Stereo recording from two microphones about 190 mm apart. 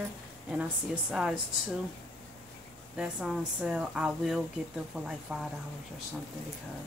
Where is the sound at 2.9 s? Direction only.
5° right (ahead or behind).